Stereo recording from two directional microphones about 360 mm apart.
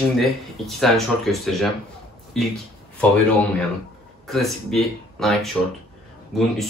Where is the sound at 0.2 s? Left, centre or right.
Centre.